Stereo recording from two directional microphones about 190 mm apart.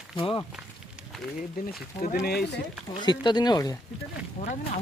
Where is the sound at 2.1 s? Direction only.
60° left (ahead or behind).